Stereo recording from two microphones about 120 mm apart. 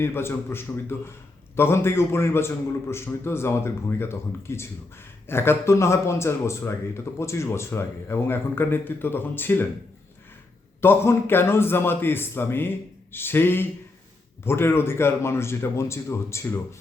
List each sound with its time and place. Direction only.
0.0 s speech: 20° left (ahead or behind)
10.8 s speech: 20° left (ahead or behind)